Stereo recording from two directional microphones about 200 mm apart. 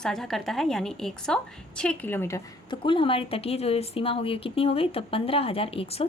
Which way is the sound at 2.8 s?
25° left (ahead or behind).